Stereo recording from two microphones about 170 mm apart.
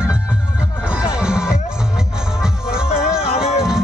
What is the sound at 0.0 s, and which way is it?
Music, 5° right (ahead or behind).